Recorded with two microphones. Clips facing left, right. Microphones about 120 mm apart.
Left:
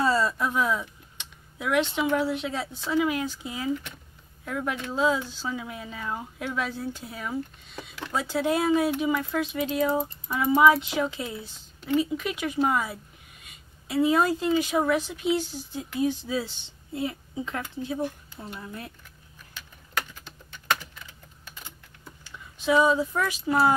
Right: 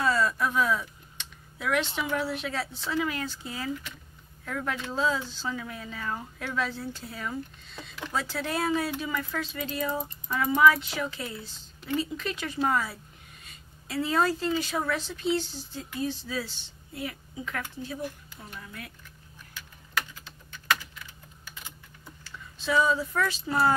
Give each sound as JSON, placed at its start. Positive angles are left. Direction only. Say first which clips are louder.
{"t": 0.0, "sound": "speech", "louder": "left 2 dB", "side_deg": 30}
{"t": 22.2, "sound": "speech", "louder": "left 5 dB", "side_deg": 20}